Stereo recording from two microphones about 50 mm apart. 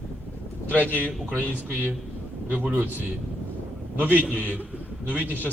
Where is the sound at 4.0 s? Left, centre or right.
Right.